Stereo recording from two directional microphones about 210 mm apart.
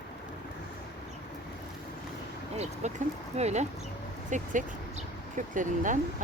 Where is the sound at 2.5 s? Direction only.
35° right (ahead or behind).